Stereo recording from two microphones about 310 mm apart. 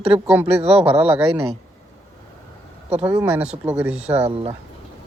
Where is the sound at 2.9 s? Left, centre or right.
Centre.